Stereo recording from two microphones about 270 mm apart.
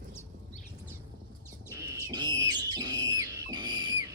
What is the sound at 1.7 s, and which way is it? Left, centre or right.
Bird, centre.